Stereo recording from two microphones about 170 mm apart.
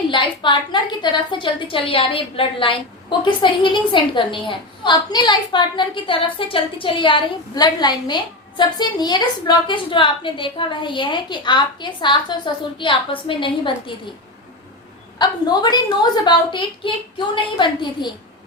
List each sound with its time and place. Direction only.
0.1 s a woman's voice: 30° left (ahead or behind)
15.2 s a woman's voice: 25° left (ahead or behind)